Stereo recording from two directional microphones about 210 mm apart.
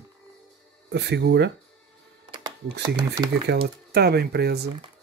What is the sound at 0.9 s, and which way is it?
Speech, 55° right (ahead or behind).